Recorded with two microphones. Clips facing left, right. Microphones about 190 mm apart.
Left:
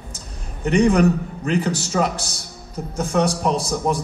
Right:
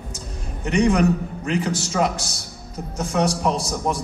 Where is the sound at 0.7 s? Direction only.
35° left (ahead or behind).